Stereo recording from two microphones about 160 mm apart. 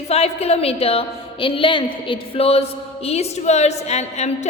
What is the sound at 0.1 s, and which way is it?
A woman's voice, 40° left (ahead or behind).